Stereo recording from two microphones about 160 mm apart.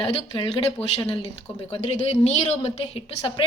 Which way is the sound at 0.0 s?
35° left (ahead or behind).